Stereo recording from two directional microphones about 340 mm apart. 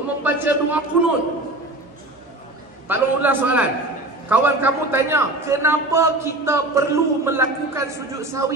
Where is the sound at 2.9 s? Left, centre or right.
Centre.